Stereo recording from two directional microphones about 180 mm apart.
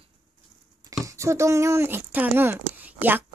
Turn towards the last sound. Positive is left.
turn(degrees=-10)  # may be behind; listen again after turning